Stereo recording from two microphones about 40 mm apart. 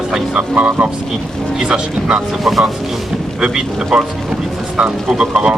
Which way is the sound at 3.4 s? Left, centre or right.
Centre.